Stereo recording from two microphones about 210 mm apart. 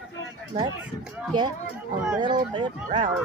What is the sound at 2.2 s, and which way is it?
Speech, 20° right (ahead or behind).